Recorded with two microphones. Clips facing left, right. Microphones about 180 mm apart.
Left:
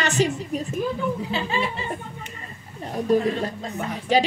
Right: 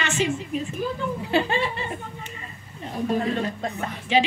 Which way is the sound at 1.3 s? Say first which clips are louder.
Right 3 dB; 60° right (ahead or behind).